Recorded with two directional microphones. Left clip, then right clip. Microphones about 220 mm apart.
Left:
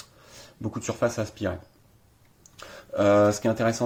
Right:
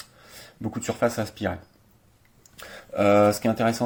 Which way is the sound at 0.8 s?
5° left (ahead or behind).